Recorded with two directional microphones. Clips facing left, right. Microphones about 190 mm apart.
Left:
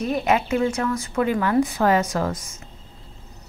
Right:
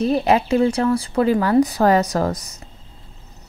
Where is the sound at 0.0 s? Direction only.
35° right (ahead or behind).